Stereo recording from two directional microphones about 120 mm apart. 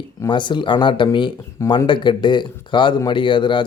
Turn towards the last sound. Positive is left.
turn(degrees=40)  # may be behind; listen again after turning